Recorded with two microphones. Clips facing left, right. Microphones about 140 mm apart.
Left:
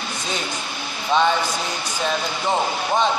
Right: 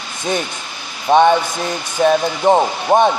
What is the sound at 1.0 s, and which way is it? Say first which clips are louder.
Speech: right 7 dB; 60° right (ahead or behind).